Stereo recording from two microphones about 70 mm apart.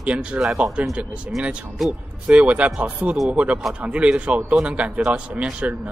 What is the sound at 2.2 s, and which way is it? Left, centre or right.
Speech, centre.